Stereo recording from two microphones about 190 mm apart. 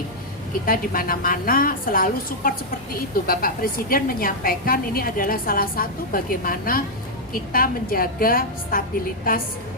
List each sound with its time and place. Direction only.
0.6 s a woman's voice: 50° left (ahead or behind)